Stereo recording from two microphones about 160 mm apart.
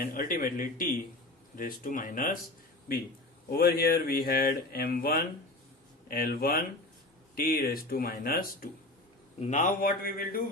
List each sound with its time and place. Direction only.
0.0 s speech: 60° left (ahead or behind)
3.5 s speech: 70° left (ahead or behind)
9.4 s speech: 50° left (ahead or behind)